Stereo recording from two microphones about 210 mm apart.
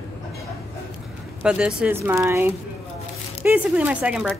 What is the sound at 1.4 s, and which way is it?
A woman's voice, 5° right (ahead or behind).